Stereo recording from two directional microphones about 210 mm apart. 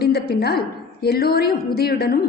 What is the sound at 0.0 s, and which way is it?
A woman's voice, 50° left (ahead or behind).